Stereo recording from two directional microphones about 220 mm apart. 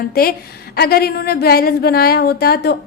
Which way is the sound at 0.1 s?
45° left (ahead or behind).